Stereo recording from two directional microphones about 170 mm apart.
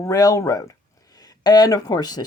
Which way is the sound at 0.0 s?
20° left (ahead or behind).